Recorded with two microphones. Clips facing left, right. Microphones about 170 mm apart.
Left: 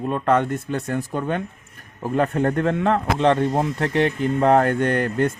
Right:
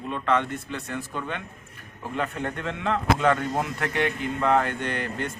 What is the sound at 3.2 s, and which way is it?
A man's voice, 30° left (ahead or behind).